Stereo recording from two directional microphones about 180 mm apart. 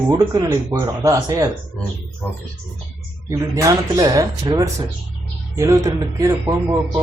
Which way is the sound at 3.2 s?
15° right (ahead or behind).